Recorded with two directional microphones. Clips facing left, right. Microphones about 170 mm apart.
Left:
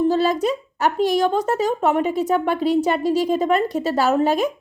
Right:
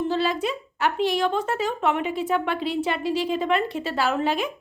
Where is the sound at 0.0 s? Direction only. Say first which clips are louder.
Left 6 dB; 40° left (ahead or behind).